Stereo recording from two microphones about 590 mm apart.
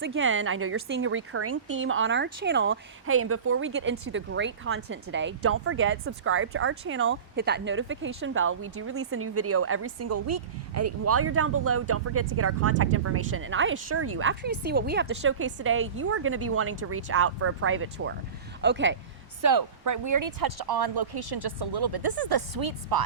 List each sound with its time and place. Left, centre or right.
0.0 s speech: centre
19.4 s speech: right